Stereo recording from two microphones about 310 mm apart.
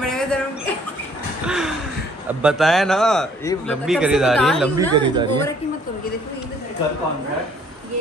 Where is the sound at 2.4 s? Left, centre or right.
Centre.